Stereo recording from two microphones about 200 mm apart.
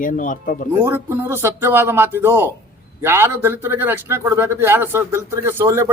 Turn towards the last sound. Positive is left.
turn(degrees=-15)  # may be behind; listen again after turning